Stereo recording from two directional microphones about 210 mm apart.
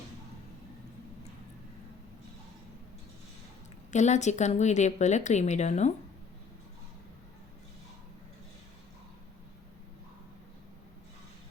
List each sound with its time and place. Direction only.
3.9 s speech: 35° left (ahead or behind)